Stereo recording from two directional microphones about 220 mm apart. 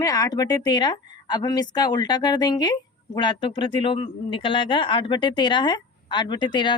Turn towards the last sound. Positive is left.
turn(degrees=20)  # may be behind; listen again after turning